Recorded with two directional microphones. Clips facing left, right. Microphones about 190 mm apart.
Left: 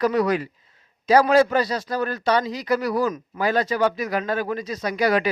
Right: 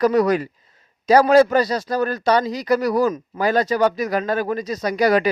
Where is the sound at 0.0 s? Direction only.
40° right (ahead or behind).